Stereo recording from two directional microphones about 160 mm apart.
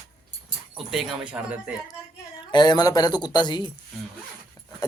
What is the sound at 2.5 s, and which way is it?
Speech, 25° left (ahead or behind).